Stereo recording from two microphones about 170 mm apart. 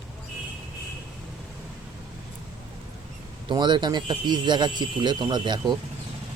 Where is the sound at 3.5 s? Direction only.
25° right (ahead or behind).